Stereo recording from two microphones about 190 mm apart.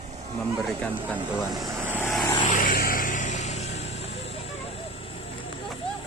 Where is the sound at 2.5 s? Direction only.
45° left (ahead or behind); by 5.5 s 30° left (ahead or behind).